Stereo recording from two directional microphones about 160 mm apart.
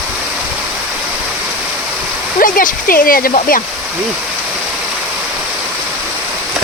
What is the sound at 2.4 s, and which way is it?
Speech, 60° left (ahead or behind).